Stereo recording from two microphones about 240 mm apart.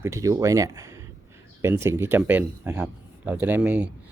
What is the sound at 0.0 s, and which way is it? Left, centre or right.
Speech, centre.